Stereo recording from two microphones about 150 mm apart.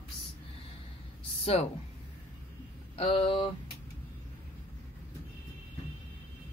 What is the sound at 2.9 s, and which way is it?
Speech, 35° left (ahead or behind).